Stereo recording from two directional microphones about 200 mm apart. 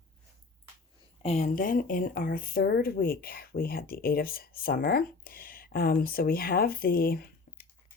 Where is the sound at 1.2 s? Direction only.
35° left (ahead or behind).